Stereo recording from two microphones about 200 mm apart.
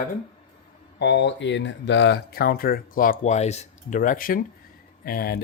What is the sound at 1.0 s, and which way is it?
Speech, 60° left (ahead or behind).